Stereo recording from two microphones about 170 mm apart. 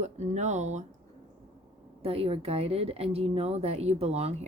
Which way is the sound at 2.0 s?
35° right (ahead or behind).